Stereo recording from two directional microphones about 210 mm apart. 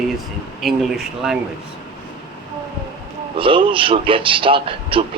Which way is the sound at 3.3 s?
25° right (ahead or behind).